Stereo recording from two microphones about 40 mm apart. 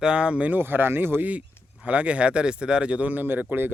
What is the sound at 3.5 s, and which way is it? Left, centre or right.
Speech, right.